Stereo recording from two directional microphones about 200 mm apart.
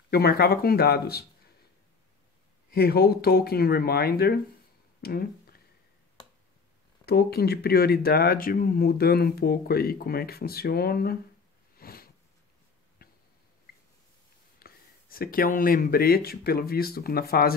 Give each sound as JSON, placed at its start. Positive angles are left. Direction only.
{"t": 0.1, "sound": "speech", "side_deg": 50}
{"t": 2.7, "sound": "speech", "side_deg": 50}
{"t": 7.1, "sound": "speech", "side_deg": 50}
{"t": 11.8, "sound": "sniff", "side_deg": 50}
{"t": 13.0, "sound": "a sound", "side_deg": 50}
{"t": 14.6, "sound": "speech", "side_deg": 45}